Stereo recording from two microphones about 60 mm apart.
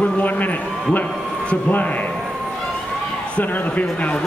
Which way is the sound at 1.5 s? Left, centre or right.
Left.